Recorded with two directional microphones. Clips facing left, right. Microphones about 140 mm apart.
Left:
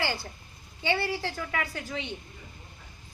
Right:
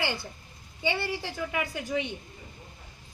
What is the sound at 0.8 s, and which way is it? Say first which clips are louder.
A woman's voice: left 2 dB; 15° right (ahead or behind).